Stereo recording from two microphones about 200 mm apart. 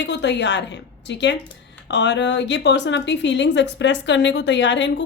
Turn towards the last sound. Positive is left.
turn(degrees=65)  # may be behind; listen again after turning